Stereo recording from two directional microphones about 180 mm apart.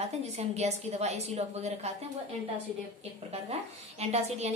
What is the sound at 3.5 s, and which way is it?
A woman's voice, 35° right (ahead or behind).